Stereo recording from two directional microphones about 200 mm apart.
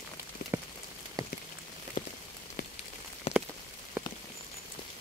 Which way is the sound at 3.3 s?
30° left (ahead or behind).